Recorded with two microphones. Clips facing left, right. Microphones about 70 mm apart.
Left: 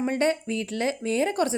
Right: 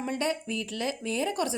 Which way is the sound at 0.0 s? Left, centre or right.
Left.